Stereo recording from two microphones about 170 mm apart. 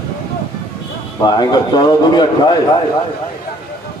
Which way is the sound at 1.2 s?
25° left (ahead or behind).